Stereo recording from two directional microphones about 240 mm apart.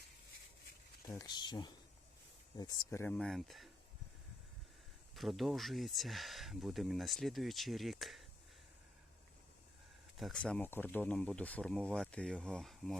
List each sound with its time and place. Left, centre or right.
1.0 s speech: centre
5.1 s speech: centre
10.2 s speech: centre